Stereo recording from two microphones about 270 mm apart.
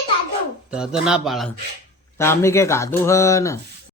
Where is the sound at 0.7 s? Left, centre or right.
Centre.